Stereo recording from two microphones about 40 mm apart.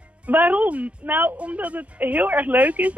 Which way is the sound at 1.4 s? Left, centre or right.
Right.